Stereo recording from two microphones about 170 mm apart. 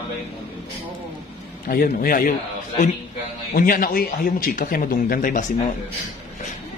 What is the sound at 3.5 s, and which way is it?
Speech, 55° left (ahead or behind).